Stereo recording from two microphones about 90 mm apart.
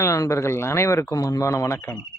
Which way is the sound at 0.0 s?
35° left (ahead or behind).